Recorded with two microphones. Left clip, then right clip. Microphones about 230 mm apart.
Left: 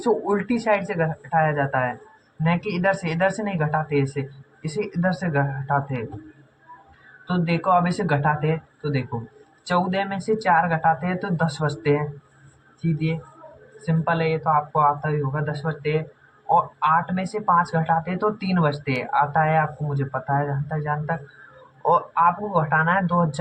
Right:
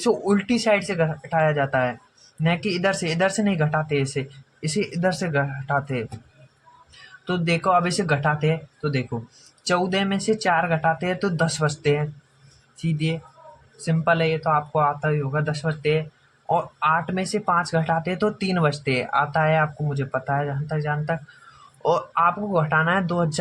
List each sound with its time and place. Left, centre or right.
0.0 s speech: right
7.3 s speech: right